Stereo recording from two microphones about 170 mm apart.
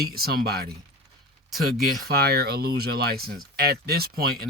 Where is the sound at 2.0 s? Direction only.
70° right (ahead or behind).